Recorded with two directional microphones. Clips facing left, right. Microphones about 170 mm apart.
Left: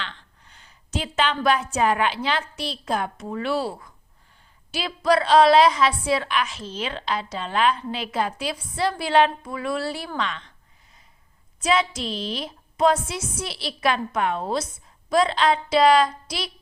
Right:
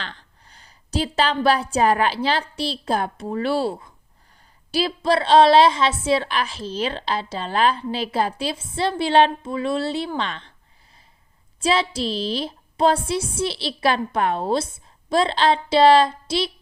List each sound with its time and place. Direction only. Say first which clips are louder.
0.0 s a woman's voice: even; 40° right (ahead or behind)
11.6 s a woman's voice: right 2 dB; 30° right (ahead or behind)